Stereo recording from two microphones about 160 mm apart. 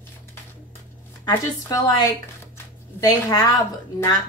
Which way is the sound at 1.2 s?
25° left (ahead or behind).